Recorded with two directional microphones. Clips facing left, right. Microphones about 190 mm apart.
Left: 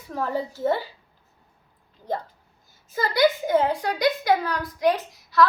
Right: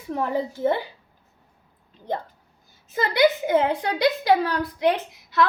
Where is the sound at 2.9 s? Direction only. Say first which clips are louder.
Right 1 dB; 25° right (ahead or behind).